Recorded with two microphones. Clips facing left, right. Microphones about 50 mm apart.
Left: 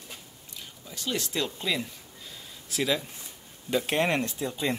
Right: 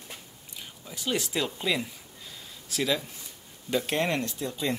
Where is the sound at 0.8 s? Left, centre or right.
Centre.